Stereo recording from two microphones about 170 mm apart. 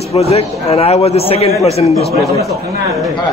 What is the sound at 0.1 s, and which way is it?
A man's voice, 35° left (ahead or behind).